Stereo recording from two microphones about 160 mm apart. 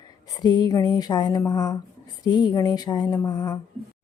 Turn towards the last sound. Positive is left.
turn(degrees=25)  # may be behind; listen again after turning